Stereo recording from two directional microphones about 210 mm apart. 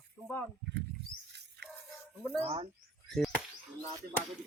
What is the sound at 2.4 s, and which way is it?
Speech, 25° right (ahead or behind).